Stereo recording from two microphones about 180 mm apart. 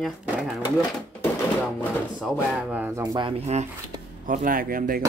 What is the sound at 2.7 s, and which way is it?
Speech, 20° right (ahead or behind).